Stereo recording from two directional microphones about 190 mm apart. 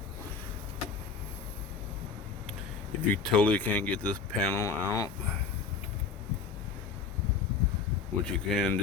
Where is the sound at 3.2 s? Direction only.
5° left (ahead or behind).